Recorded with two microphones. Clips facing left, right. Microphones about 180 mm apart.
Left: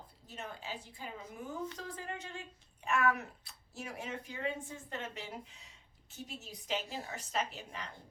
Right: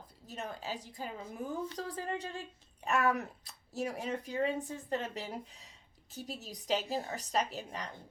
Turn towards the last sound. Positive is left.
turn(degrees=-40)  # may be behind; listen again after turning